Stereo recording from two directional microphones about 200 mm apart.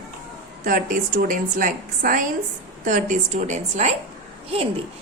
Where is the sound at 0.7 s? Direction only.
40° right (ahead or behind).